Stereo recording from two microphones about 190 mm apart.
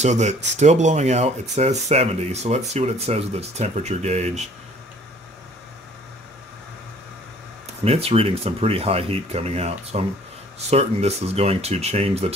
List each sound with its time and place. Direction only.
0.0 s speech: 35° right (ahead or behind)
7.8 s speech: 30° right (ahead or behind)